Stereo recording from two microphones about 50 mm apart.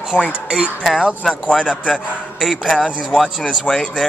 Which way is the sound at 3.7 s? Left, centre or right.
Left.